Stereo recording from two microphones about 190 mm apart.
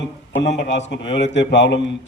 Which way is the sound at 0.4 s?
65° left (ahead or behind).